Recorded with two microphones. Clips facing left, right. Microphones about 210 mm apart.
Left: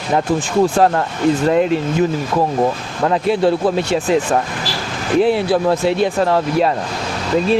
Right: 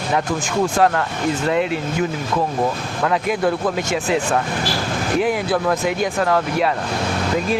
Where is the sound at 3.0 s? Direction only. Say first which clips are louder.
Left 4 dB; 30° left (ahead or behind).